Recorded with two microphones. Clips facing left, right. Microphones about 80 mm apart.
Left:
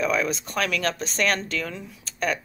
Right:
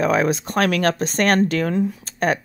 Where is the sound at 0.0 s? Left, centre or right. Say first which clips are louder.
Right 6 dB; right.